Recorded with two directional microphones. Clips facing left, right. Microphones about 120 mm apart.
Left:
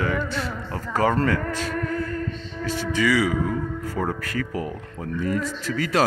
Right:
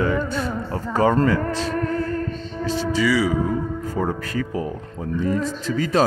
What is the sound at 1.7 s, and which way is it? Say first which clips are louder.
Music: right 3 dB; 30° right (ahead or behind).